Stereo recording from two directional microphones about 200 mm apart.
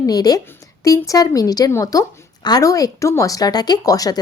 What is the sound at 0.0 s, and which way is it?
Speech, 20° left (ahead or behind).